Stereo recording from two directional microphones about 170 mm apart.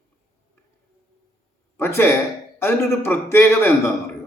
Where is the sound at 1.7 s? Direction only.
15° left (ahead or behind).